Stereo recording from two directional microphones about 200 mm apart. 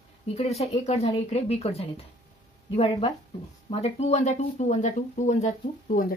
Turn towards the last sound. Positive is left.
turn(degrees=45)  # may be behind; listen again after turning